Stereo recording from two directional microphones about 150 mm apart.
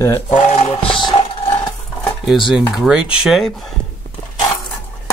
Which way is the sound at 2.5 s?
5° right (ahead or behind).